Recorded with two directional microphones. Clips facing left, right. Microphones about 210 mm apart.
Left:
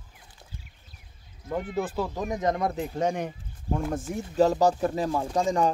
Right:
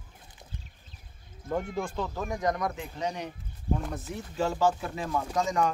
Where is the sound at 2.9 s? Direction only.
50° left (ahead or behind); by 5.7 s 30° left (ahead or behind).